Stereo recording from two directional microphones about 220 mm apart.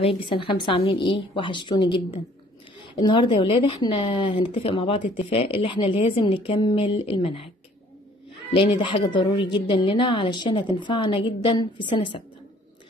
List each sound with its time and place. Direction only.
0.0 s a woman's voice: 25° left (ahead or behind)
8.5 s a woman's voice: 25° left (ahead or behind)